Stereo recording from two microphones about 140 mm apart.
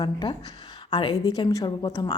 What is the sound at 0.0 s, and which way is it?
A woman's voice, 30° left (ahead or behind).